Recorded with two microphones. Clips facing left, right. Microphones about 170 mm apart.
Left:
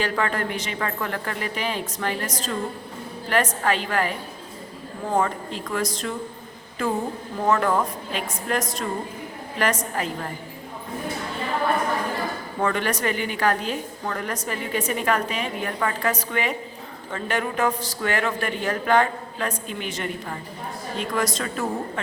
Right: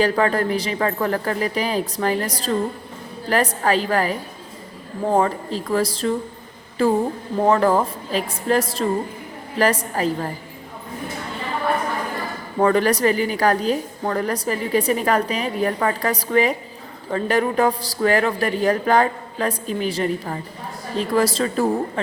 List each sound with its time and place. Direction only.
0.0 s a woman's voice: 35° right (ahead or behind)
5.1 s a woman's voice: 35° right (ahead or behind)
12.5 s a woman's voice: 35° right (ahead or behind)